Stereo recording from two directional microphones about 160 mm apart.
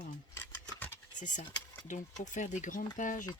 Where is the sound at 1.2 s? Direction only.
50° left (ahead or behind).